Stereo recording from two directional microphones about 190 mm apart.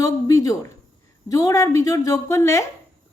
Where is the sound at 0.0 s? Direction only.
15° left (ahead or behind).